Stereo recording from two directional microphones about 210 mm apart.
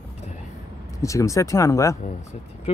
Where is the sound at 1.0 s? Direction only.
15° left (ahead or behind).